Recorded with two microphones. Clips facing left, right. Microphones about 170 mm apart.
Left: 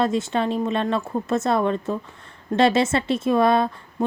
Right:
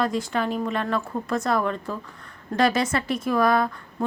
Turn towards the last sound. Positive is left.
turn(degrees=25)  # may be behind; listen again after turning